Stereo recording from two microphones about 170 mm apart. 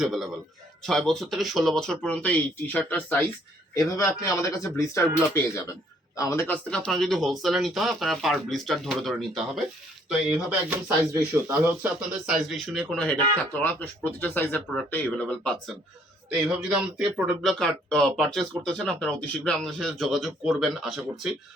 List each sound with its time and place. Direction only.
0.0 s speech: centre (ahead or behind); by 6.4 s 20° left (ahead or behind)
6.4 s speech: 5° left (ahead or behind)